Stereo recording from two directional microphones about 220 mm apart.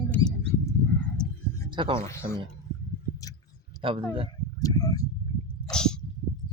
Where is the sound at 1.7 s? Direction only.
20° right (ahead or behind).